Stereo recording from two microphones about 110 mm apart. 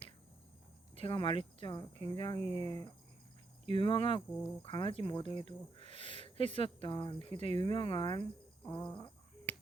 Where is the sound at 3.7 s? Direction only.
50° left (ahead or behind).